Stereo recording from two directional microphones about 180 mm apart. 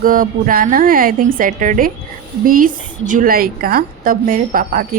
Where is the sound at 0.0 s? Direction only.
50° right (ahead or behind).